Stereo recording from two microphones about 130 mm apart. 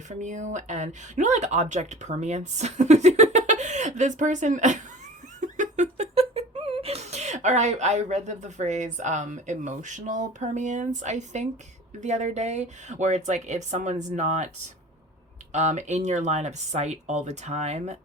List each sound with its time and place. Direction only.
0.1 s speech: 70° right (ahead or behind)
15.5 s speech: 65° right (ahead or behind)